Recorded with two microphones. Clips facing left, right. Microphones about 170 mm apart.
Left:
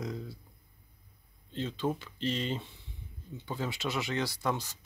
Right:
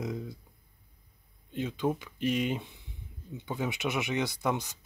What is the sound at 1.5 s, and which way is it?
Speech, 10° right (ahead or behind).